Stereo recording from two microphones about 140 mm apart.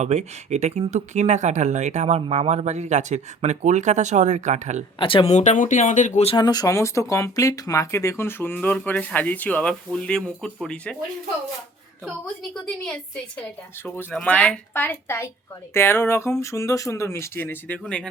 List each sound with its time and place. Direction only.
0.0 s speech: 50° right (ahead or behind)
4.9 s speech: 40° left (ahead or behind)
5.4 s speech: 60° left (ahead or behind)
6.3 s speech: 30° left (ahead or behind); by 10.9 s 5° left (ahead or behind)
13.8 s speech: 15° left (ahead or behind)